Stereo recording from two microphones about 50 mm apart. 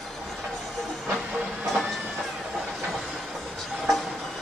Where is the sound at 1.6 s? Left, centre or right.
Centre.